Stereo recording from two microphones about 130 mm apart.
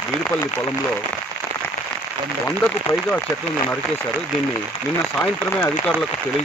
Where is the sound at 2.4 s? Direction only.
15° left (ahead or behind).